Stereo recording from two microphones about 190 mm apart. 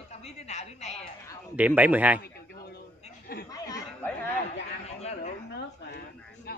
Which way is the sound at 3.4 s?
20° left (ahead or behind).